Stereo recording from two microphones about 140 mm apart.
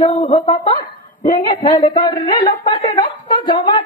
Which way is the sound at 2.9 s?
35° left (ahead or behind).